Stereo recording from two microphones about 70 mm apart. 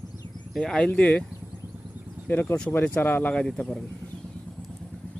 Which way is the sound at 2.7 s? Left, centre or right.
Left.